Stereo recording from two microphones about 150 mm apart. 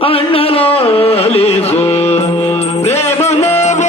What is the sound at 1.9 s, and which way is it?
Mantra, 45° left (ahead or behind).